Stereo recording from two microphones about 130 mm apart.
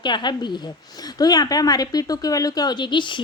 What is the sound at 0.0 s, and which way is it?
A woman's voice, 35° left (ahead or behind).